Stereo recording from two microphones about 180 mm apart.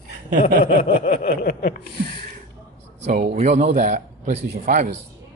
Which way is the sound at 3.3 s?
40° right (ahead or behind).